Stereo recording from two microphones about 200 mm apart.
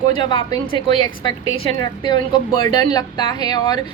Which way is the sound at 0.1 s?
25° left (ahead or behind).